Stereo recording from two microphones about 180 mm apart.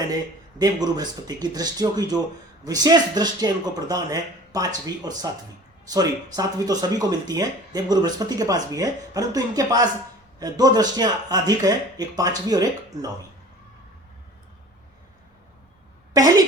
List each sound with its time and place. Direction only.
0.6 s speech: 20° right (ahead or behind)
6.3 s speech: 20° right (ahead or behind)
16.1 s speech: 20° right (ahead or behind)